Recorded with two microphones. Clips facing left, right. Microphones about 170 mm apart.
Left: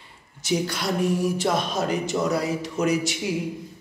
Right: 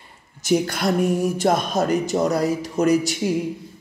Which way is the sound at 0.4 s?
50° right (ahead or behind).